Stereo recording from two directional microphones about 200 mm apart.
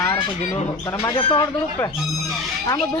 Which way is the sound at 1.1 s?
20° left (ahead or behind).